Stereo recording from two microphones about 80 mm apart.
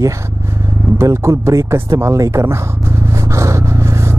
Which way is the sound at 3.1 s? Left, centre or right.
Right.